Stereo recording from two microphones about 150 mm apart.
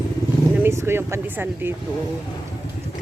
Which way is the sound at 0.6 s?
15° right (ahead or behind).